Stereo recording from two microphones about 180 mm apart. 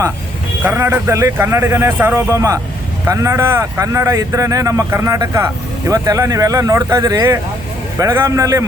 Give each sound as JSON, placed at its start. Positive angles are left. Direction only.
{"t": 0.6, "sound": "speech", "side_deg": -10}